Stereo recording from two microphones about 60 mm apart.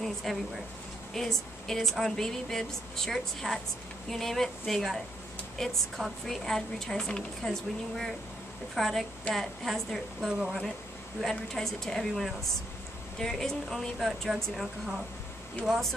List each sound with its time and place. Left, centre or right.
0.0 s a woman's voice: centre